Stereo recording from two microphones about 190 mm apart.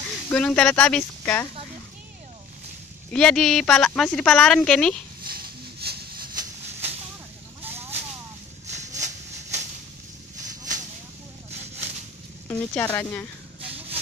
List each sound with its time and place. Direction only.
0.3 s speech: 5° left (ahead or behind)
3.1 s speech: 5° left (ahead or behind)
5.2 s a sound: 55° right (ahead or behind)
7.6 s vehicle: 10° right (ahead or behind)
8.6 s a sound: 40° right (ahead or behind)
12.4 s speech: 10° left (ahead or behind)